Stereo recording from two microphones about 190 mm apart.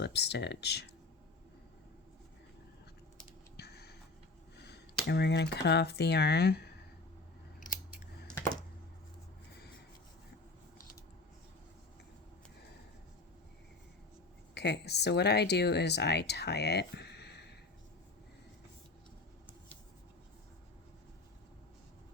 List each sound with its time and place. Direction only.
0.0 s speech: 65° left (ahead or behind)
3.6 s a sound: 60° left (ahead or behind)
4.5 s speech: 60° left (ahead or behind)
14.5 s speech: 60° left (ahead or behind)